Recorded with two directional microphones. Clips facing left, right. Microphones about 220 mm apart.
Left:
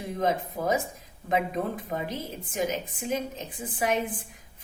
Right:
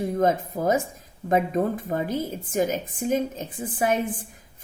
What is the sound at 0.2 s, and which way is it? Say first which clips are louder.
A woman's voice: right 3 dB; 50° right (ahead or behind).